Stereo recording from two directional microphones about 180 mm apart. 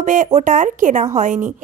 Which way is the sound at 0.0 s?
45° right (ahead or behind).